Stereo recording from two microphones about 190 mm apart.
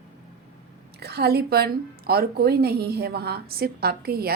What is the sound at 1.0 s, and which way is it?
A woman's voice, 55° right (ahead or behind).